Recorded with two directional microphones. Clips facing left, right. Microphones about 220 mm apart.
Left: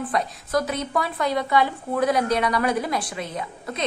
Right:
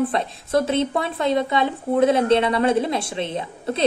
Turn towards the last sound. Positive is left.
turn(degrees=-30)  # may be behind; listen again after turning